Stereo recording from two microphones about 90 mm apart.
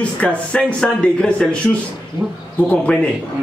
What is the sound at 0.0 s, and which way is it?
A man's voice, 15° left (ahead or behind).